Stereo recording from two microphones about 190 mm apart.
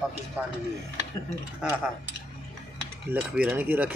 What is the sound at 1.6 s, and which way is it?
Speech, 5° right (ahead or behind).